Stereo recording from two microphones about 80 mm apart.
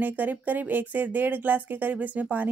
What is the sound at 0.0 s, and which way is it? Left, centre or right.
Speech, right.